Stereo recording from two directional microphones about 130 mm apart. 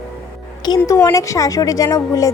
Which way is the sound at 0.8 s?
25° left (ahead or behind).